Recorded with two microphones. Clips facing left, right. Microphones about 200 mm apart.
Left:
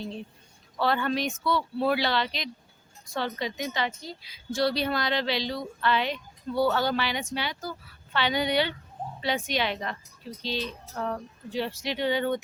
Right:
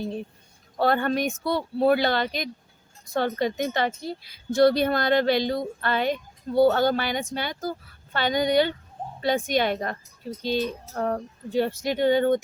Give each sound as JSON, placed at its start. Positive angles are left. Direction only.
{"t": 0.8, "sound": "a woman's voice", "side_deg": -50}